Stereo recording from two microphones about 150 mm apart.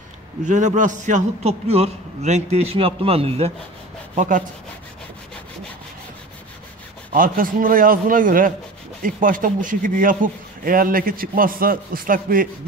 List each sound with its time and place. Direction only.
0.4 s a man's voice: 55° right (ahead or behind)
4.1 s speech: 55° right (ahead or behind)
7.1 s a man's voice: 70° right (ahead or behind)